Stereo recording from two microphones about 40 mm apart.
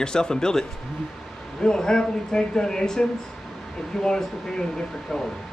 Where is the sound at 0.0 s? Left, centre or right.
Centre.